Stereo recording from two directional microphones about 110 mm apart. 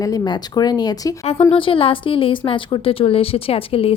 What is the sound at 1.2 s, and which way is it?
Speech, 60° left (ahead or behind).